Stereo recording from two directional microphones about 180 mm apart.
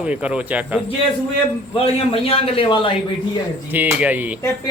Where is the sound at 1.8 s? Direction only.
30° left (ahead or behind).